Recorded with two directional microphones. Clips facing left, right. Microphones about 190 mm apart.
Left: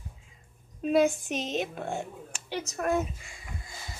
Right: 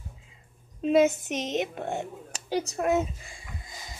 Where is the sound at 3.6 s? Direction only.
20° right (ahead or behind).